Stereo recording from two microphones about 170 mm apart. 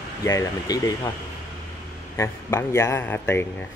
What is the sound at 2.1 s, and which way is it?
Speech, 15° left (ahead or behind).